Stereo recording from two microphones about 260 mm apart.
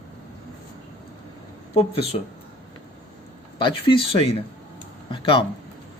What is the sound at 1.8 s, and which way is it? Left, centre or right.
Speech, left.